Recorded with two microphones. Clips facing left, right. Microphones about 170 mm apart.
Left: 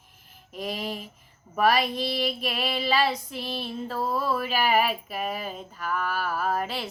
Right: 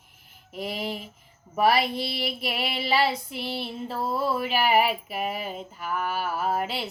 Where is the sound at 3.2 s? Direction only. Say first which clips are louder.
Right 1 dB; 65° right (ahead or behind).